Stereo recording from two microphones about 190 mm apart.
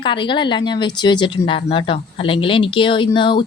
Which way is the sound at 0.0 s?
25° left (ahead or behind).